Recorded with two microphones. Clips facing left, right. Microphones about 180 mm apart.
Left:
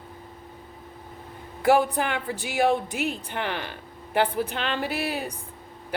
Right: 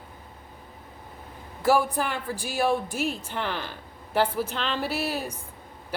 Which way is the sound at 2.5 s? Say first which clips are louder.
Left 2 dB; 65° left (ahead or behind).